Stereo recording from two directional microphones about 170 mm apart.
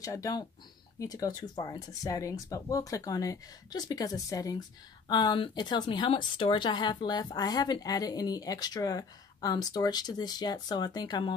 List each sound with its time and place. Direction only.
0.0 s speech: 20° left (ahead or behind)